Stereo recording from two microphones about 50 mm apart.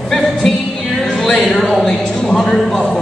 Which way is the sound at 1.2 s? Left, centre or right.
Centre.